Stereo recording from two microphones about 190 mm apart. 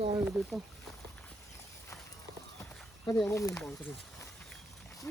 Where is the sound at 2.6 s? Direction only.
15° left (ahead or behind).